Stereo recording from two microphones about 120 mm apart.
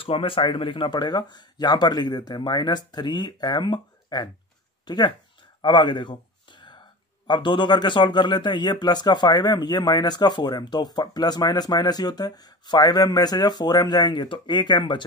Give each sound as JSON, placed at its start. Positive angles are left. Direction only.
{"t": 0.0, "sound": "speech", "side_deg": 50}
{"t": 5.6, "sound": "a sound", "side_deg": 40}
{"t": 7.2, "sound": "speech", "side_deg": 40}